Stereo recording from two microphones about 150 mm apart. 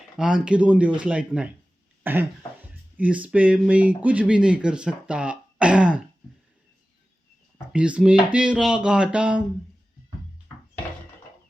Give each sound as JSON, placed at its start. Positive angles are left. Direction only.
{"t": 0.2, "sound": "speech", "side_deg": -5}
{"t": 7.7, "sound": "speech", "side_deg": -10}